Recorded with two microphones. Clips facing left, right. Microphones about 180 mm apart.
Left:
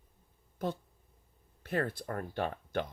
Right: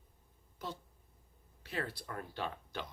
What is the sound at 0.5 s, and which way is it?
Speech, 55° left (ahead or behind).